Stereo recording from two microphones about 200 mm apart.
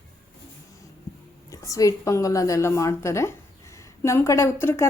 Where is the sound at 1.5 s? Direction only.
15° left (ahead or behind).